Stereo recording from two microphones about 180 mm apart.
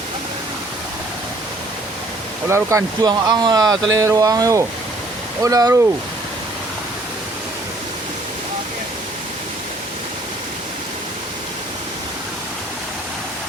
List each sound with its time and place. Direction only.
2.5 s speech: 15° right (ahead or behind)